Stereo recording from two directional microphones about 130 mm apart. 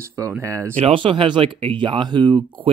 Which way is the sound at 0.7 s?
45° right (ahead or behind).